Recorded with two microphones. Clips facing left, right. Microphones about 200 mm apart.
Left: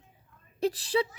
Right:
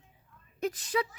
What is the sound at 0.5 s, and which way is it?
Speech, 30° left (ahead or behind).